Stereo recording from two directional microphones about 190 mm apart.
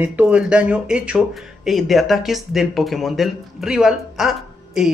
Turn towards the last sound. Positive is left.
turn(degrees=0)  # may be behind; listen again after turning